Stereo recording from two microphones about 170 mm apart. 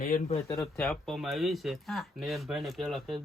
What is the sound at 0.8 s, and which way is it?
Speech, centre (ahead or behind).